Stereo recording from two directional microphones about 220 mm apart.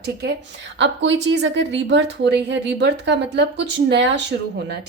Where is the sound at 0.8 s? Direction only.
55° right (ahead or behind).